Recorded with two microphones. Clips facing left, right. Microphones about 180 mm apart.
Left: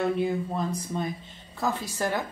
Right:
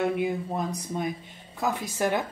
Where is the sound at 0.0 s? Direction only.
10° right (ahead or behind).